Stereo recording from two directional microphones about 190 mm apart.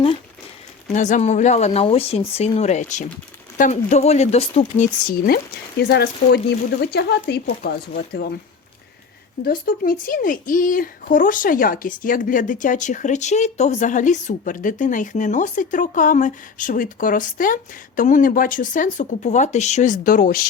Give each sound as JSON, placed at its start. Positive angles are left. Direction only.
{"t": 0.9, "sound": "speech", "side_deg": 40}
{"t": 5.9, "sound": "speech", "side_deg": 60}
{"t": 9.4, "sound": "speech", "side_deg": 50}